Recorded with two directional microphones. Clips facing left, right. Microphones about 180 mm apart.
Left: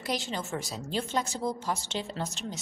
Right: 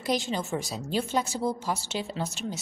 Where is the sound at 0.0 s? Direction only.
15° right (ahead or behind).